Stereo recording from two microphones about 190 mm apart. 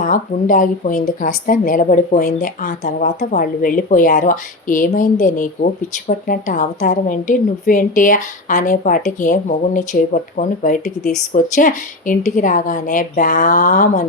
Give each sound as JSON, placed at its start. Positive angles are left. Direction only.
{"t": 0.0, "sound": "a woman's voice", "side_deg": 45}